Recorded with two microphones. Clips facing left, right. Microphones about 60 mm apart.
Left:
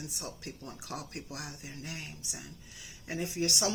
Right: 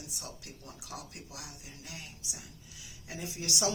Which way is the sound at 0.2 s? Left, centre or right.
Left.